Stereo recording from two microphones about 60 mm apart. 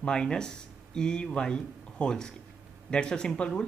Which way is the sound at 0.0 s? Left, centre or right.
Centre.